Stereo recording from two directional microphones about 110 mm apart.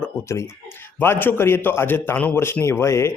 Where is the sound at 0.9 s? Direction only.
20° left (ahead or behind).